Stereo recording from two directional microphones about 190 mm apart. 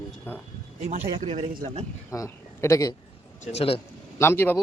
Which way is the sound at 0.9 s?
35° right (ahead or behind).